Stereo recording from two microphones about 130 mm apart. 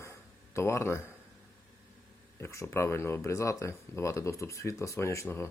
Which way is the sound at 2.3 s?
20° left (ahead or behind).